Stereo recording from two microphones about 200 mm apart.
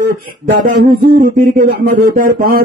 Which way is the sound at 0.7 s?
40° right (ahead or behind).